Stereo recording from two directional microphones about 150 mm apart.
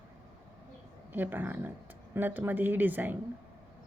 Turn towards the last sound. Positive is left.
turn(degrees=-10)  # may be behind; listen again after turning